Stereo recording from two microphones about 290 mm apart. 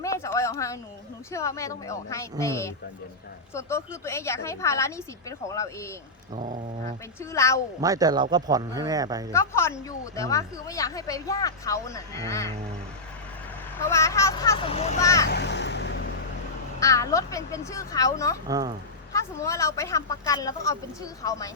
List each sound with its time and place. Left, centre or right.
0.0 s a sound: centre
1.3 s a woman's voice: centre
6.3 s dog: right
7.2 s a woman's voice: centre
7.8 s speech: centre
9.3 s a woman's voice: centre
13.8 s a woman's voice: centre
15.0 s a woman's voice: centre
15.3 s vehicle: left
16.8 s a woman's voice: centre
18.4 s speech: centre
19.1 s a woman's voice: centre